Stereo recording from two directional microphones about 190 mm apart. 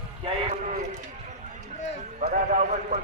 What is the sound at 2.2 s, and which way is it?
Speech, 40° right (ahead or behind).